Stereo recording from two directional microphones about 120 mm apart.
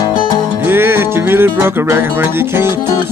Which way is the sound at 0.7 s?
20° right (ahead or behind).